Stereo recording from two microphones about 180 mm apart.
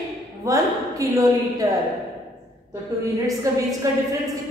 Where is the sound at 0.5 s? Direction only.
20° right (ahead or behind).